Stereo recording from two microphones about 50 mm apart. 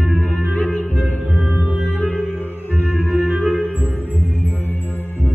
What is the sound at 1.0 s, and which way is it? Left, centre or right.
Music, right.